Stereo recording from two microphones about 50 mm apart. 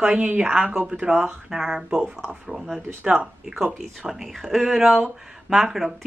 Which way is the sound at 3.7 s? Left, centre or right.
Centre.